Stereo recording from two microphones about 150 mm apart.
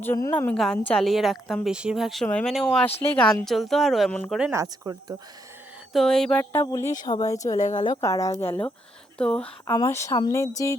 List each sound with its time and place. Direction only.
0.0 s a woman's voice: 15° left (ahead or behind); by 4.5 s 5° right (ahead or behind)
4.5 s speech: 20° right (ahead or behind)
5.9 s a woman's voice: centre (ahead or behind)
6.4 s speech: 15° left (ahead or behind)
9.7 s speech: 20° left (ahead or behind)